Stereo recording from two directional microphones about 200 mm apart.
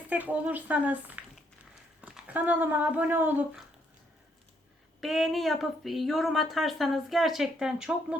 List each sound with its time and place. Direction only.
0.1 s speech: 10° right (ahead or behind)
4.9 s speech: centre (ahead or behind)